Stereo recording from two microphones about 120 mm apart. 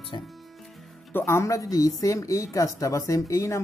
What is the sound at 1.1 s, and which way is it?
Speech, 20° left (ahead or behind).